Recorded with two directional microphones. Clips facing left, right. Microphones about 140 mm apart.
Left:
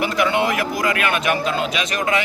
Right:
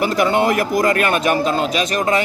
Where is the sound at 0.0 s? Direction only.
40° right (ahead or behind).